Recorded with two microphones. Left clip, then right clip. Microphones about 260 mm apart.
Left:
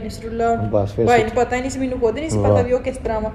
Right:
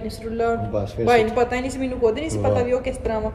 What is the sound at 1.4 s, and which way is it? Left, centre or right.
Speech, centre.